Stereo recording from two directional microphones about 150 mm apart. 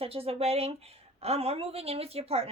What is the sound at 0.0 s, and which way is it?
A woman's voice, 40° right (ahead or behind).